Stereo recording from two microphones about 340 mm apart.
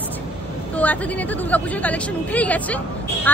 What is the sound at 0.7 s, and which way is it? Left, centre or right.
A woman's voice, centre.